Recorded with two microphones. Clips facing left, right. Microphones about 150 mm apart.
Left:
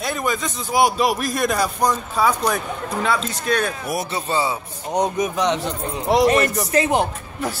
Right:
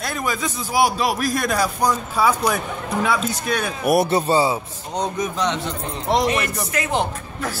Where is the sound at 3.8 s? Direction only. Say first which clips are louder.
Right 8 dB; 65° right (ahead or behind).